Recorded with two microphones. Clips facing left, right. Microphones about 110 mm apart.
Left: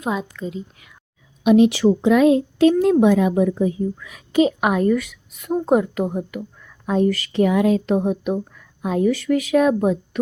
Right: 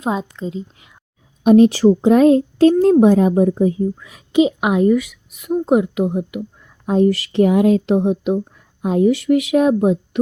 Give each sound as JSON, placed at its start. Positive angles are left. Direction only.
{"t": 0.0, "sound": "a woman's voice", "side_deg": -30}
{"t": 1.5, "sound": "a woman's voice", "side_deg": -40}